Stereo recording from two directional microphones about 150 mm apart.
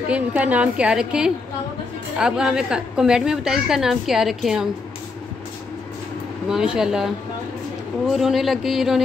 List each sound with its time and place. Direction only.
0.1 s a woman's voice: 10° right (ahead or behind)
6.5 s a woman's voice: 5° right (ahead or behind)
8.1 s a woman's voice: centre (ahead or behind)